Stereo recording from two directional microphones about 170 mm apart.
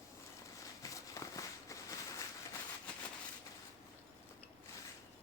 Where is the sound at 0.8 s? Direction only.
20° left (ahead or behind).